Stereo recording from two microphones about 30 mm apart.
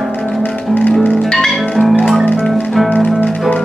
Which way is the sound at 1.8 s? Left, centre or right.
Left.